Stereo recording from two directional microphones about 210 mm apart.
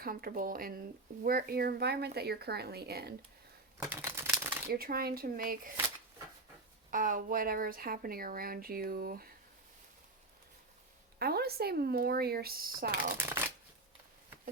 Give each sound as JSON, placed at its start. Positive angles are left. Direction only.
{"t": 0.0, "sound": "speech", "side_deg": -45}
{"t": 3.8, "sound": "typewriter", "side_deg": -10}
{"t": 4.7, "sound": "speech", "side_deg": -45}
{"t": 6.9, "sound": "speech", "side_deg": -40}
{"t": 11.2, "sound": "speech", "side_deg": -45}
{"t": 13.0, "sound": "speech", "side_deg": -10}